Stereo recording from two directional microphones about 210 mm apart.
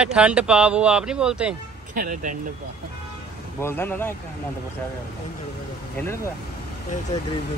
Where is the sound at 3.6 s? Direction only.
10° left (ahead or behind).